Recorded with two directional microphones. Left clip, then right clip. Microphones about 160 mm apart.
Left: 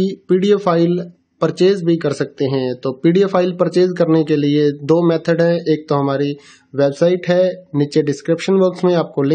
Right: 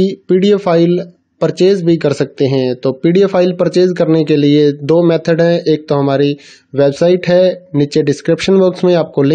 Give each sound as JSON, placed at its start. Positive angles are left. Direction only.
{"t": 0.0, "sound": "speech", "side_deg": -20}